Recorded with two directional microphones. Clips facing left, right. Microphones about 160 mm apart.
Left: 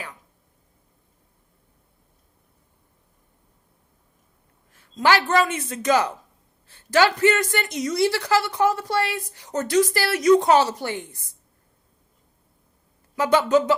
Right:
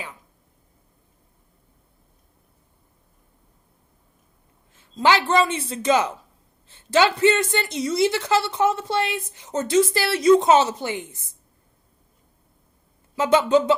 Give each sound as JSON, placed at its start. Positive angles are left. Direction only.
{"t": 4.7, "sound": "a sound", "side_deg": -20}
{"t": 5.3, "sound": "a woman's voice", "side_deg": -30}
{"t": 13.1, "sound": "a woman's voice", "side_deg": -20}